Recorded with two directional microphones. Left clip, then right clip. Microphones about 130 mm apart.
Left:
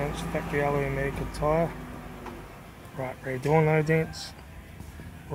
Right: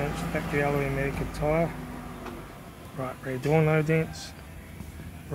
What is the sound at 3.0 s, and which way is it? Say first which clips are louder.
Speech: even; 5° left (ahead or behind).